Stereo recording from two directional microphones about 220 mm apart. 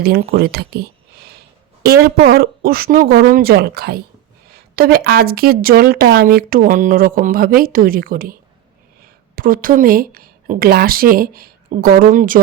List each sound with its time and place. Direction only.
0.0 s speech: 45° right (ahead or behind)